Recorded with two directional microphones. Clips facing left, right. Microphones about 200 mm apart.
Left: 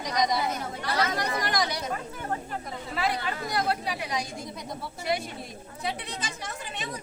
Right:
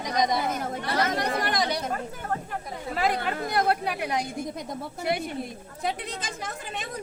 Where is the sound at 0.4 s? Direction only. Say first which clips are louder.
Right 2 dB; 50° right (ahead or behind).